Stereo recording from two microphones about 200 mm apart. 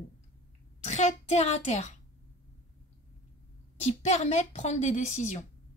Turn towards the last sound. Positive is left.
turn(degrees=35)  # may be behind; listen again after turning